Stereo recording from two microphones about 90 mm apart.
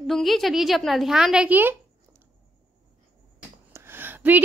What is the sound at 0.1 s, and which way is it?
A woman's voice, centre (ahead or behind).